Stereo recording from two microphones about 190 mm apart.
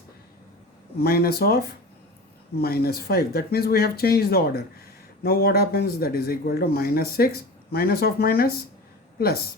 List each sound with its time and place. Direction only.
0.9 s speech: 55° left (ahead or behind)